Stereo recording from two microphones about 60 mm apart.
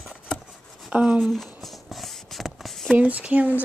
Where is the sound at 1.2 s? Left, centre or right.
Centre.